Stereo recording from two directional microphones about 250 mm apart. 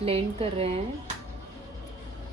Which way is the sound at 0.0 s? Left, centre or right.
Right.